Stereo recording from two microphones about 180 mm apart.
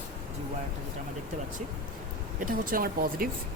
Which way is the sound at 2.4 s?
50° right (ahead or behind).